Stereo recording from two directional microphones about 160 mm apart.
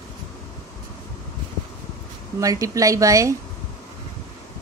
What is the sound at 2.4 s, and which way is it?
Speech, 20° right (ahead or behind).